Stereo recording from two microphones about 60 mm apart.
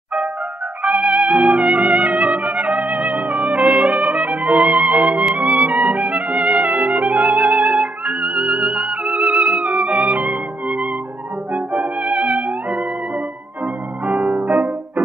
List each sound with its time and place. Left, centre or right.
0.8 s music: centre
14.0 s music: right